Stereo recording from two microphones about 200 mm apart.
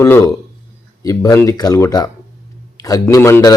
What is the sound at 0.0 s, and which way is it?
Speech, 15° left (ahead or behind).